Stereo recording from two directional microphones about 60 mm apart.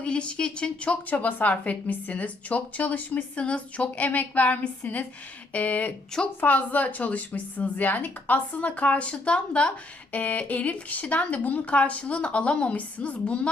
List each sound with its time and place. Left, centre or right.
0.0 s speech: centre